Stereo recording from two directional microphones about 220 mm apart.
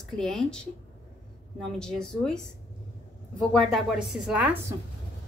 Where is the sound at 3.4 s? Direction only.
Centre (ahead or behind).